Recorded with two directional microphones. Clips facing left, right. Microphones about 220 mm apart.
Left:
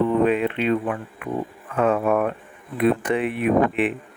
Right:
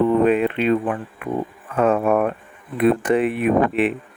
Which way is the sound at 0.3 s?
45° right (ahead or behind).